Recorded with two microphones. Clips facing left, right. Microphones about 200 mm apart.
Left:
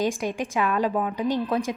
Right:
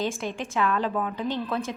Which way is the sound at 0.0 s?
15° left (ahead or behind).